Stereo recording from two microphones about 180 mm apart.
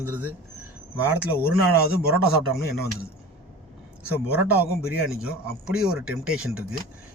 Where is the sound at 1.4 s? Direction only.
60° left (ahead or behind).